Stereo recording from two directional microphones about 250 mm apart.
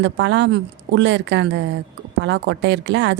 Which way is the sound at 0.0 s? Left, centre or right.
Right.